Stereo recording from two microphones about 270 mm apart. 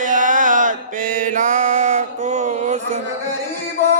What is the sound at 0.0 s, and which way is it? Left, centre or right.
Mantra, right.